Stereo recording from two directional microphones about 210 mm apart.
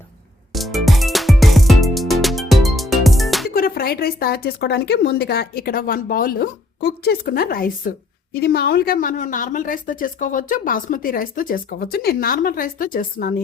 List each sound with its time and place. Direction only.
0.5 s music: centre (ahead or behind)
3.5 s speech: 45° left (ahead or behind)